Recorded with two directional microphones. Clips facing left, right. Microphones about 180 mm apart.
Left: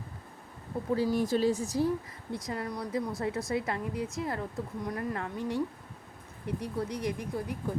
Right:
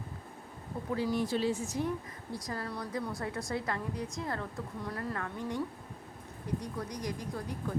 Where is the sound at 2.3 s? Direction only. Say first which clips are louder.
Left 3 dB; 20° left (ahead or behind).